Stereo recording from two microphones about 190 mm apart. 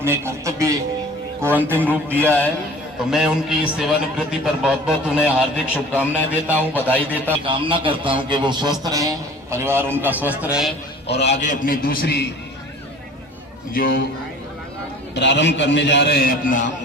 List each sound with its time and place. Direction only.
0.0 s a man's voice: 10° right (ahead or behind)
6.7 s a man's voice: 10° left (ahead or behind)
7.4 s a man's voice: 25° right (ahead or behind); by 10.7 s 5° right (ahead or behind)
11.2 s a man's voice: 35° left (ahead or behind); by 12.3 s 60° left (ahead or behind)
13.7 s a man's voice: 50° left (ahead or behind)
15.1 s a man's voice: 65° left (ahead or behind); by 16.7 s 45° left (ahead or behind)